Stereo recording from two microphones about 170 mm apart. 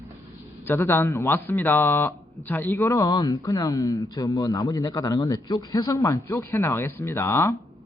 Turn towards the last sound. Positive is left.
turn(degrees=15)  # may be behind; listen again after turning